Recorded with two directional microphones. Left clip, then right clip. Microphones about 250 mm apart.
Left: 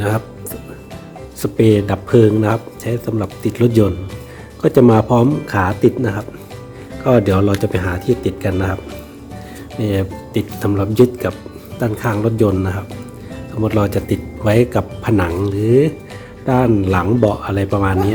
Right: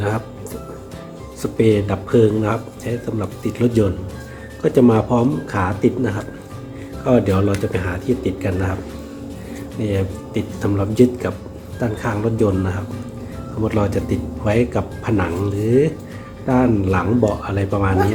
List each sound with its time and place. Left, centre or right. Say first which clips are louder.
1.4 s speech: left 3 dB; left
9.8 s speech: left 3 dB; left